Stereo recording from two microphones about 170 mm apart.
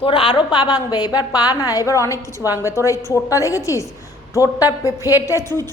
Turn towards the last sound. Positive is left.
turn(degrees=15)  # may be behind; listen again after turning